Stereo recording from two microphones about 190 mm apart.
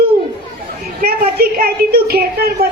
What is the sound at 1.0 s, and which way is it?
A woman's voice, 50° right (ahead or behind).